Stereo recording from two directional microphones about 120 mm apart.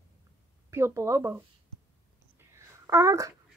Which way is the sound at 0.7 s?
25° right (ahead or behind).